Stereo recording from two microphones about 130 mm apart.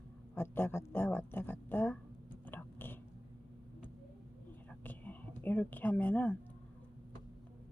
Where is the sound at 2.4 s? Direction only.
15° left (ahead or behind).